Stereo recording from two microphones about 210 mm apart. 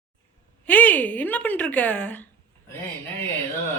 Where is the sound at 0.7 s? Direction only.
10° left (ahead or behind).